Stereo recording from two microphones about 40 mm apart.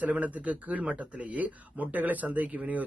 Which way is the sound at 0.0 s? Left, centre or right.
Right.